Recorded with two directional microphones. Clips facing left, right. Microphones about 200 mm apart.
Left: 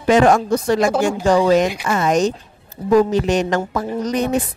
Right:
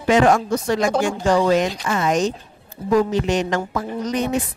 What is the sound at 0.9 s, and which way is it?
Speech, 5° left (ahead or behind).